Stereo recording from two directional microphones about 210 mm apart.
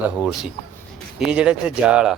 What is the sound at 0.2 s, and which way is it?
Speech, 5° right (ahead or behind).